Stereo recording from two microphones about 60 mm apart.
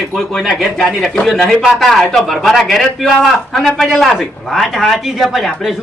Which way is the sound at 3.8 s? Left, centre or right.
Centre.